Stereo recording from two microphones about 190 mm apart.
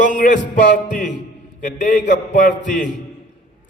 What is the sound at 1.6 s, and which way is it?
Speech, 40° left (ahead or behind).